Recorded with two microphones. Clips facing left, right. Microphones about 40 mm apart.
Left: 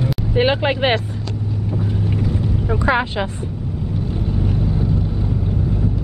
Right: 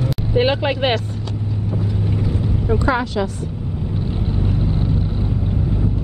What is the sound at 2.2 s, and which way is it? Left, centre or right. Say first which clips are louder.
Vehicle: left 1 dB; centre.